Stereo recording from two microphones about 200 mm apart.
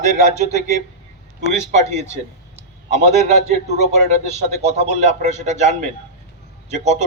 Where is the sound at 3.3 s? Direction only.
35° right (ahead or behind).